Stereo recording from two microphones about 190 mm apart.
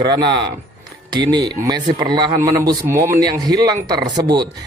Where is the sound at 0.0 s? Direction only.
25° right (ahead or behind).